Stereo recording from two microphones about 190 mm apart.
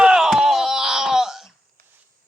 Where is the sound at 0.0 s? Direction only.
5° right (ahead or behind).